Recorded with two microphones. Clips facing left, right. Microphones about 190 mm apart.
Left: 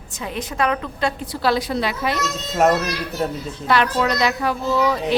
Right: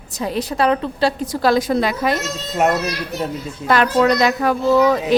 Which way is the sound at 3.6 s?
45° right (ahead or behind).